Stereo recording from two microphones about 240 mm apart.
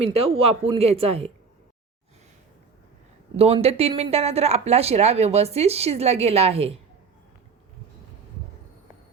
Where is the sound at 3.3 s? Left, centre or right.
Right.